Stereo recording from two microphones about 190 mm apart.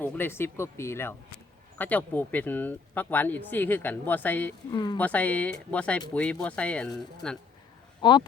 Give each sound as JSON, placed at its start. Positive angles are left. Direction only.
{"t": 0.0, "sound": "speech", "side_deg": 10}
{"t": 4.7, "sound": "speech", "side_deg": 25}
{"t": 4.9, "sound": "speech", "side_deg": 10}
{"t": 8.0, "sound": "speech", "side_deg": 25}